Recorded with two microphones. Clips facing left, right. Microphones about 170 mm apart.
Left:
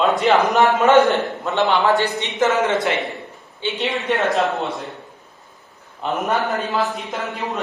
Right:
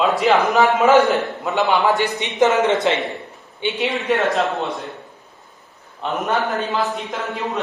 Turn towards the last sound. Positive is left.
turn(degrees=0)  # may be behind; listen again after turning